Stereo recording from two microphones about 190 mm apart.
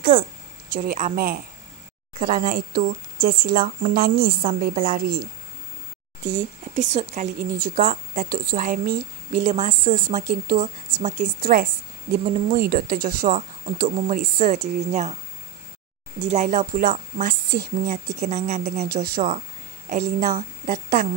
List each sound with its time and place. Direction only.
0.0 s speech: 45° right (ahead or behind)
6.2 s speech: 40° right (ahead or behind)
16.2 s speech: 35° right (ahead or behind)
17.9 s speech: 35° right (ahead or behind)